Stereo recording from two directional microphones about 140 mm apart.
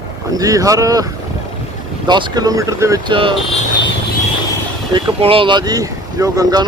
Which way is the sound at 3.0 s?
35° right (ahead or behind).